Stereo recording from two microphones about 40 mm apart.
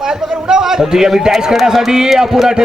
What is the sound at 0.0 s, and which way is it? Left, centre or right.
A man's voice, centre.